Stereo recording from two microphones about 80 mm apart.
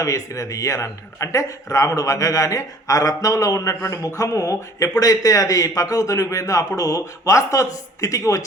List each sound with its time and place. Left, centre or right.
0.0 s a man's voice: left